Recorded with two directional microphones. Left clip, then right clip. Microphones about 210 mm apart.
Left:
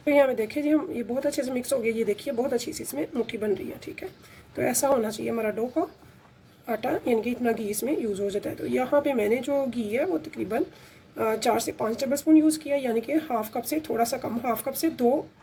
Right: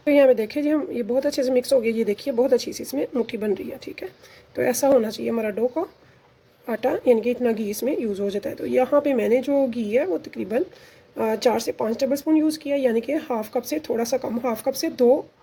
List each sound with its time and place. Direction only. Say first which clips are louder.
0.0 s a woman's voice: right 5 dB; 40° right (ahead or behind)
4.5 s a woman's voice: right 5 dB; 40° right (ahead or behind)